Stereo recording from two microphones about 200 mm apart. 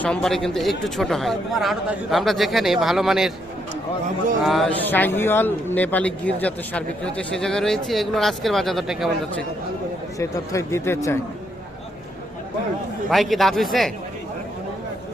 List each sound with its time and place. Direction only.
0.0 s speech: 5° left (ahead or behind)
4.4 s a man's voice: 5° left (ahead or behind)
10.2 s a man's voice: 15° left (ahead or behind)
13.1 s speech: centre (ahead or behind)